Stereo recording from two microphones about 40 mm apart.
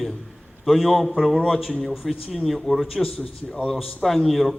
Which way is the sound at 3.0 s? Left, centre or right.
Centre.